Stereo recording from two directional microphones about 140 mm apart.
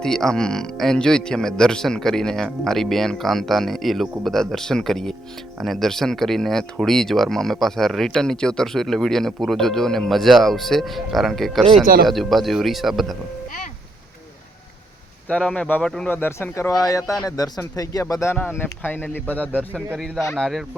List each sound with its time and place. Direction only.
0.0 s speech: 5° left (ahead or behind)
15.3 s speech: 5° left (ahead or behind)
20.3 s speech: centre (ahead or behind)